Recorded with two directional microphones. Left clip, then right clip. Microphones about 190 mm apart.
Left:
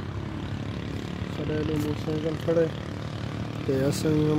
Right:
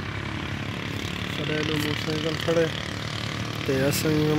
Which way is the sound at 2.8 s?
50° left (ahead or behind).